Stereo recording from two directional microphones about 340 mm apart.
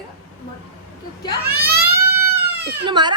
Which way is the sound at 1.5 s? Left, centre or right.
Right.